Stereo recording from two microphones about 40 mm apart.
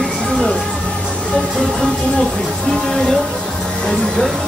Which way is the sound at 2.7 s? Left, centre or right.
Centre.